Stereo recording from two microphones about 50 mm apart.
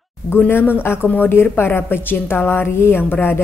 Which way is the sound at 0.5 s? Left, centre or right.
Left.